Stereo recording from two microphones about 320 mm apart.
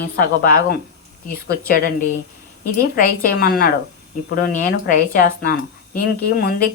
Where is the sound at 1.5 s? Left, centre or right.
Left.